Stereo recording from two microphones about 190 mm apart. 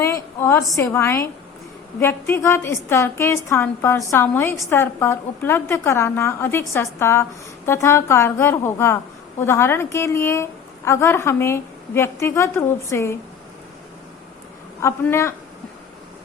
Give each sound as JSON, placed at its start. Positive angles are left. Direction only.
{"t": 0.0, "sound": "a sound", "side_deg": 15}
{"t": 0.8, "sound": "a woman's voice", "side_deg": 15}
{"t": 14.8, "sound": "a woman's voice", "side_deg": 15}